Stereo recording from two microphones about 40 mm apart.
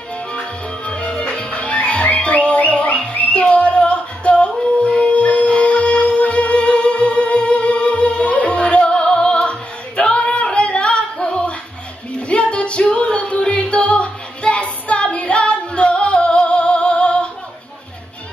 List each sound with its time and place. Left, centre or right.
0.3 s music: left
10.0 s singing: left
12.2 s music: left